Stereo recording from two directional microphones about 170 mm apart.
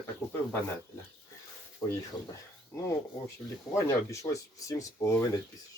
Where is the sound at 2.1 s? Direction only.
30° left (ahead or behind).